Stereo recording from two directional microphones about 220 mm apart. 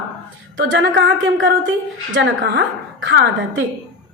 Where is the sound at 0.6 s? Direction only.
55° right (ahead or behind).